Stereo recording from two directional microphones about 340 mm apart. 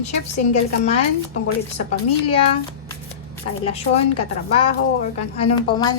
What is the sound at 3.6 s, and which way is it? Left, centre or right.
A woman's voice, centre.